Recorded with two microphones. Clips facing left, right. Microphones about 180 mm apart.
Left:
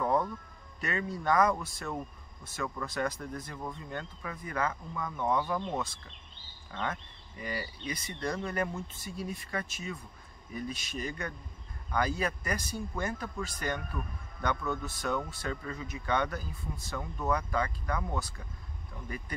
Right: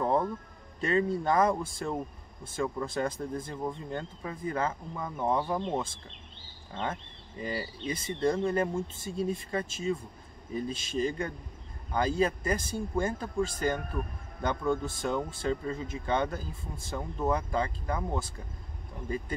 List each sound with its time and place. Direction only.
0.0 s music: 30° right (ahead or behind)
0.7 s a man's voice: 30° right (ahead or behind)